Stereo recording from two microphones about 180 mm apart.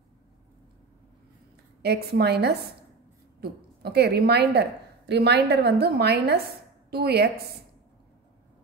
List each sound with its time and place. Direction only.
1.8 s a woman's voice: 65° right (ahead or behind)